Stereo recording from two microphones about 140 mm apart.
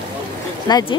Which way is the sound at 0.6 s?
30° left (ahead or behind).